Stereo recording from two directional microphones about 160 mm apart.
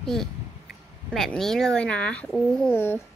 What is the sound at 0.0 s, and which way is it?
Speech, centre (ahead or behind).